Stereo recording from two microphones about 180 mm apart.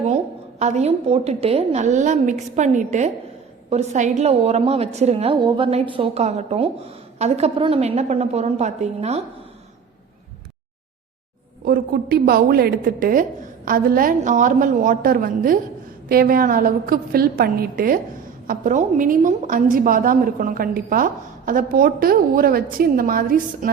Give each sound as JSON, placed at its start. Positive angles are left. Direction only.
{"t": 0.6, "sound": "a woman's voice", "side_deg": -40}
{"t": 11.6, "sound": "a woman's voice", "side_deg": -55}